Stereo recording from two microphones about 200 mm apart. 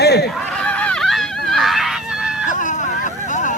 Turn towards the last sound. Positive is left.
turn(degrees=40)  # may be behind; listen again after turning